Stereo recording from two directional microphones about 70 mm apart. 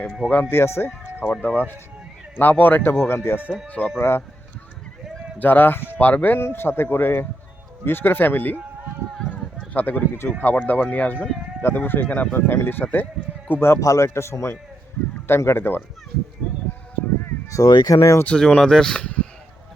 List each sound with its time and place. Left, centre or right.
0.5 s speech: left
1.2 s a man's voice: left
3.7 s speech: left
3.9 s a man's voice: left
5.4 s a man's voice: left
9.7 s a man's voice: left
13.7 s a man's voice: left
17.6 s speech: left
18.3 s speech: centre
19.0 s a sound: centre